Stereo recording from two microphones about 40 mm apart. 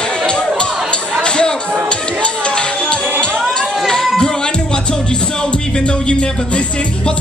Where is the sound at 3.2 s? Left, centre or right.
Left.